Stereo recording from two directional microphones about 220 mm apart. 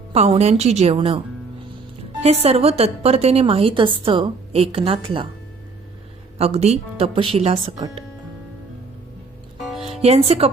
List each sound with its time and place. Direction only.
0.1 s a woman's voice: 30° right (ahead or behind)
2.2 s a woman's voice: 30° right (ahead or behind)
6.4 s a woman's voice: 30° right (ahead or behind)
10.0 s a woman's voice: 30° right (ahead or behind)